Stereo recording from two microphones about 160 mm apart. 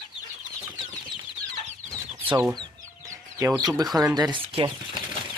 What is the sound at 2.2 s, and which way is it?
Speech, 10° right (ahead or behind).